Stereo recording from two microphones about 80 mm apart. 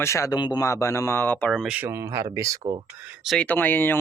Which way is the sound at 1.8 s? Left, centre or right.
Right.